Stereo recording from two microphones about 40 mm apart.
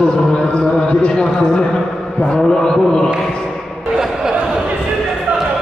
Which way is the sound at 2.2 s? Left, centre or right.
Centre.